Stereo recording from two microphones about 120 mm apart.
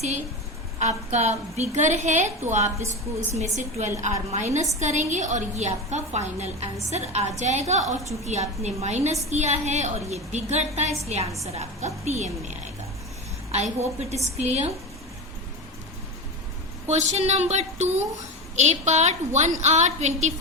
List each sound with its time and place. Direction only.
0.8 s a woman's voice: 75° right (ahead or behind)
2.7 s a woman's voice: 25° right (ahead or behind)
3.3 s a woman's voice: 80° right
12.0 s a woman's voice: 70° right (ahead or behind)
16.8 s a woman's voice: 70° right (ahead or behind)